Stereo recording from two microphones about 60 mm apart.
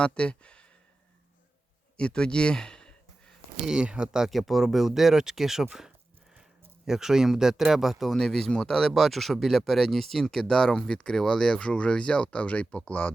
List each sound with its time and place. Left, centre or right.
0.0 s speech: centre
2.0 s a sound: centre
3.7 s speech: centre
4.3 s speech: centre
6.8 s speech: centre; by 13.1 s left